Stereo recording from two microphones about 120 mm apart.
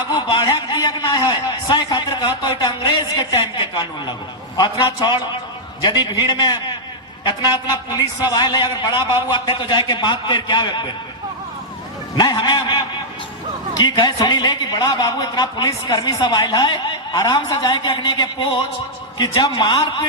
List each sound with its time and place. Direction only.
0.1 s a sound: 35° left (ahead or behind)
4.5 s a man's voice: 35° left (ahead or behind)
12.1 s a man's voice: 35° left (ahead or behind)